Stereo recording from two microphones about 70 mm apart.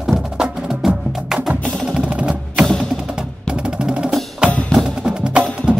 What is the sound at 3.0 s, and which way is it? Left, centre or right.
Percussion, centre.